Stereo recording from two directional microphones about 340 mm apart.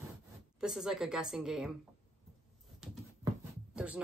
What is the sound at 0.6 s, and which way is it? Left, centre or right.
Speech, centre.